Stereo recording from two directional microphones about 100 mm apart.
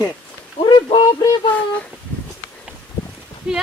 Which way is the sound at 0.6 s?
55° left (ahead or behind).